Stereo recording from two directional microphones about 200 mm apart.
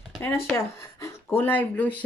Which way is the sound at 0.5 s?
15° left (ahead or behind).